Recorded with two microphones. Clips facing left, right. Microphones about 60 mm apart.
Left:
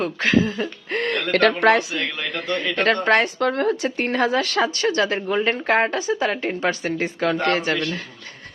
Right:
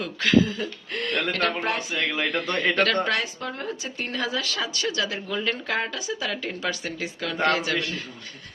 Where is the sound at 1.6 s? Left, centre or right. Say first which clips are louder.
Left 11 dB; left.